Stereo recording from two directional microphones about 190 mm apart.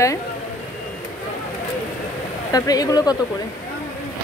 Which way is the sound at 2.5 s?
20° left (ahead or behind).